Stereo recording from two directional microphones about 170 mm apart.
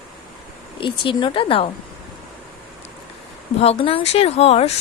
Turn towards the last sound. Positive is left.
turn(degrees=35)  # may be behind; listen again after turning